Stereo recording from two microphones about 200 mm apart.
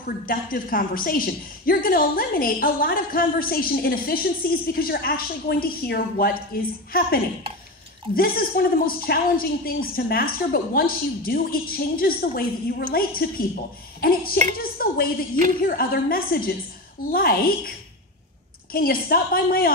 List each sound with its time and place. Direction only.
0.0 s a woman's voice: 45° left (ahead or behind)